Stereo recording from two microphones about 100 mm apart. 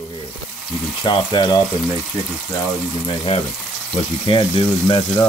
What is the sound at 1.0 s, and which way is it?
Speech, 45° left (ahead or behind).